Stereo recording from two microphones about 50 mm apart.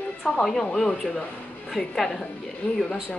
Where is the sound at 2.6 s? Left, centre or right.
Left.